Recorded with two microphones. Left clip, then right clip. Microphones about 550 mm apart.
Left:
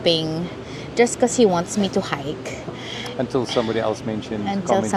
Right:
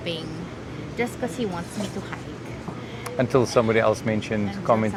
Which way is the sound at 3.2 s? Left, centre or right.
Right.